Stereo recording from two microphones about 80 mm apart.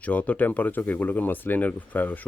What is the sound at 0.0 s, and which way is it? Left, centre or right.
Speech, centre.